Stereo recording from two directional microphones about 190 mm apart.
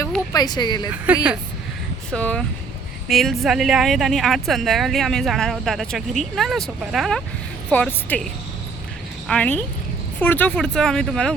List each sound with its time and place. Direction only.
0.3 s speech: 20° left (ahead or behind)
1.0 s speech: 5° right (ahead or behind)
2.0 s a woman's voice: 5° left (ahead or behind)